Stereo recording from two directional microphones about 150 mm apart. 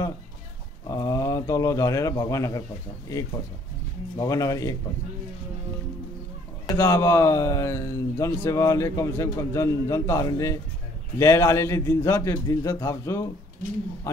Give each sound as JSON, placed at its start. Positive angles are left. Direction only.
{"t": 0.8, "sound": "speech", "side_deg": 25}
{"t": 6.7, "sound": "speech", "side_deg": 20}